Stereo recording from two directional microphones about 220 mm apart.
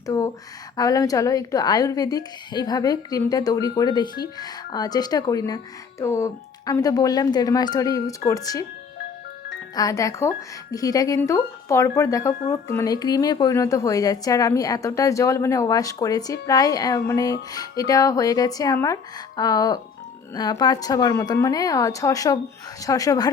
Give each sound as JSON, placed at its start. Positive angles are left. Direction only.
{"t": 0.0, "sound": "speech", "side_deg": 15}
{"t": 9.7, "sound": "speech", "side_deg": 15}